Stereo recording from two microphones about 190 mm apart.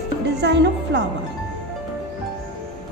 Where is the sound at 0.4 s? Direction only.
65° right (ahead or behind).